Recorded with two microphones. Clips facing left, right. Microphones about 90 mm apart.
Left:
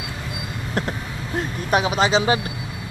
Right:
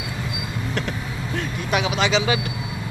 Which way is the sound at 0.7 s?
35° left (ahead or behind).